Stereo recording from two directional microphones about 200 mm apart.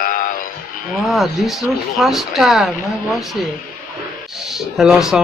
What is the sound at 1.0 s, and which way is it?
Speech, centre (ahead or behind).